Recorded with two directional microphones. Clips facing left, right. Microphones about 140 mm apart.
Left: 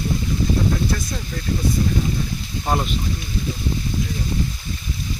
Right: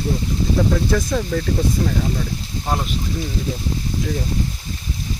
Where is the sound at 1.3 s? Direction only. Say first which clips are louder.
Right 9 dB; 90° right.